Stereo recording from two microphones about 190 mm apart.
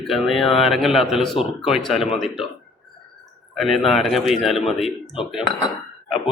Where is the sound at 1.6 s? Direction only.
Centre (ahead or behind).